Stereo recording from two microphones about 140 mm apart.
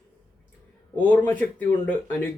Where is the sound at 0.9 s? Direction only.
10° left (ahead or behind).